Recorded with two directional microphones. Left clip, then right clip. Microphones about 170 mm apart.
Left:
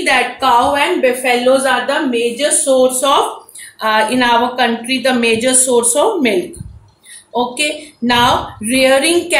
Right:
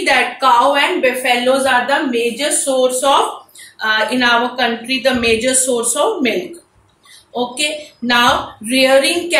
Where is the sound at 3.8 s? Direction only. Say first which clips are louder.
Left 2 dB; 60° left (ahead or behind).